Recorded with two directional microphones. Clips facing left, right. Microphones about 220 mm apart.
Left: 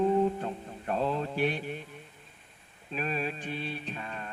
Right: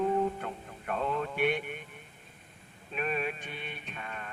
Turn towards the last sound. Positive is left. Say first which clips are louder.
# left 4 dB
turn(degrees=30)  # may be behind; listen again after turning